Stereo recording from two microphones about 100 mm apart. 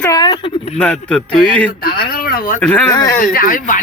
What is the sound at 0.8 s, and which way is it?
A man's voice, 10° left (ahead or behind).